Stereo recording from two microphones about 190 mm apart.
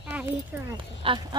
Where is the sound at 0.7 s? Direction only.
25° right (ahead or behind).